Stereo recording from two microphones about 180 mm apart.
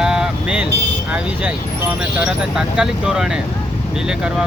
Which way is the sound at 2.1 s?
5° right (ahead or behind).